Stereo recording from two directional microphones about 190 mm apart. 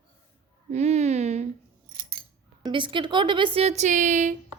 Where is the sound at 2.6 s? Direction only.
25° right (ahead or behind); by 4.3 s 40° right (ahead or behind).